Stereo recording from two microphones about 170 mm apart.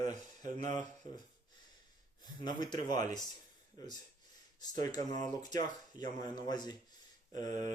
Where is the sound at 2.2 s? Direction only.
25° left (ahead or behind).